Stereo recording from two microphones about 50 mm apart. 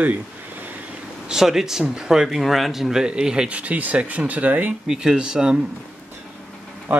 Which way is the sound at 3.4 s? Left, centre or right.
Right.